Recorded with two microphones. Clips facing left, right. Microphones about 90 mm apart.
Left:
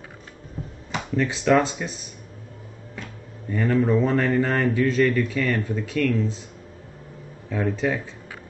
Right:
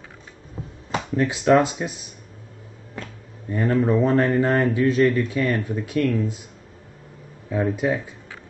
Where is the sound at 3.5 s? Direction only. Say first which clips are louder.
Right 1 dB; 20° right (ahead or behind).